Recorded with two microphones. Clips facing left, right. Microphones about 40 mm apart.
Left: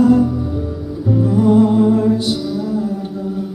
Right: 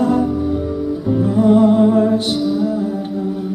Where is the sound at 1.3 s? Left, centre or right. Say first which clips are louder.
Right 1 dB; right.